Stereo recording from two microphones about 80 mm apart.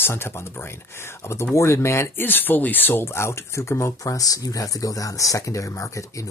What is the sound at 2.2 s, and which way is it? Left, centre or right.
Speech, left.